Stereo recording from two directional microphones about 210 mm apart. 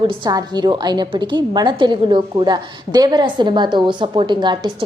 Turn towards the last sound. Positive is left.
turn(degrees=-20)  # may be behind; listen again after turning